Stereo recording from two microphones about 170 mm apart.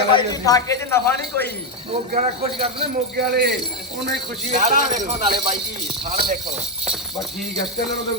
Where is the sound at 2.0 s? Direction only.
50° right (ahead or behind).